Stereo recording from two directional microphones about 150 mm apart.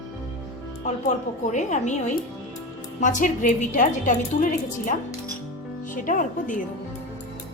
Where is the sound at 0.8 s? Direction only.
50° left (ahead or behind).